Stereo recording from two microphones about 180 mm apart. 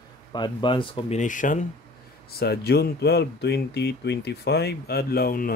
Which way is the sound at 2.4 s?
60° left (ahead or behind).